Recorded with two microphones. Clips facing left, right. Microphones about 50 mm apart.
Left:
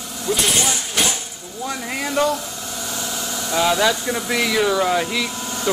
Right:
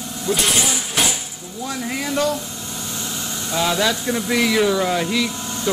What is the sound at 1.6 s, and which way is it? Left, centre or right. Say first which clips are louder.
Speech: even; centre.